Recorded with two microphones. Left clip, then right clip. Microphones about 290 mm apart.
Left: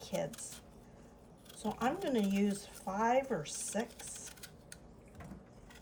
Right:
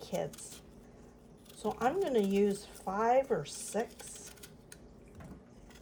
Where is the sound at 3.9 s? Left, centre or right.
Centre.